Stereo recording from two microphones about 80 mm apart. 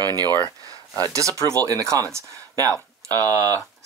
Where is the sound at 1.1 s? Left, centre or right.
Right.